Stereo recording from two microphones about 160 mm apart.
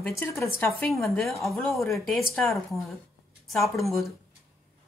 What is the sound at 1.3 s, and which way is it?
Speech, centre (ahead or behind).